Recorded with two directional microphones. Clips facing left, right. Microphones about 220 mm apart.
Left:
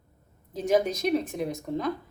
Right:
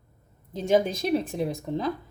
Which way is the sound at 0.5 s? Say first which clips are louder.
Right 1 dB; 25° right (ahead or behind).